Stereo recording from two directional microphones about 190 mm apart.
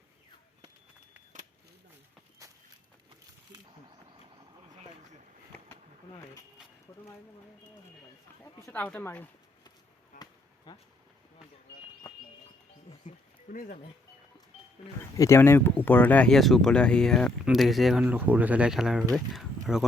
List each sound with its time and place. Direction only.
2.4 s walk: 15° right (ahead or behind)
8.6 s speech: 10° left (ahead or behind)
10.1 s basketball bounce: 50° left (ahead or behind)
10.7 s speech: 20° left (ahead or behind)
13.1 s a sound: 45° left (ahead or behind)
15.1 s speech: 15° left (ahead or behind); by 19.8 s centre (ahead or behind)